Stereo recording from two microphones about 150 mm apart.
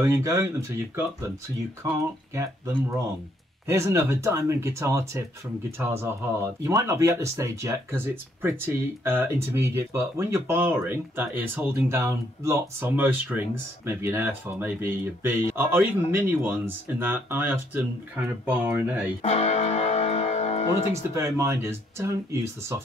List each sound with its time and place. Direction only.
0.0 s speech: 20° right (ahead or behind)
19.2 s music: 50° left (ahead or behind)
20.9 s speech: 20° right (ahead or behind)